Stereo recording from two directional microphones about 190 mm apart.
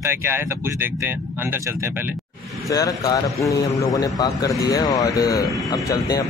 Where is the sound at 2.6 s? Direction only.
20° left (ahead or behind).